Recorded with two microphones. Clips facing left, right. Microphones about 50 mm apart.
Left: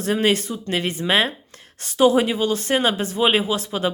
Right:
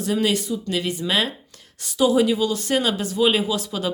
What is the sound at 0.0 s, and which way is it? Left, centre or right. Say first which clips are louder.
Speech: left 2 dB; left.